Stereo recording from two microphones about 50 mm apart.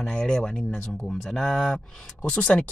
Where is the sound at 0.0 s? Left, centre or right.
Centre.